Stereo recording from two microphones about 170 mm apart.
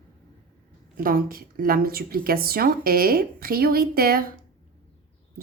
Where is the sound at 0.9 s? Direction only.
60° right (ahead or behind).